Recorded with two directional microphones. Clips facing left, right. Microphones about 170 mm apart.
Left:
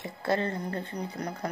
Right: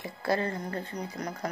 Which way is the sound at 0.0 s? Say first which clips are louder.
Even; 25° left (ahead or behind).